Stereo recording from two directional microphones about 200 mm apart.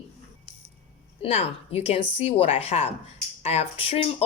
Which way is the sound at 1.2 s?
30° left (ahead or behind).